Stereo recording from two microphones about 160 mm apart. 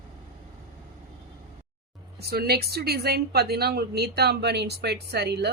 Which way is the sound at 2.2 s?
80° right.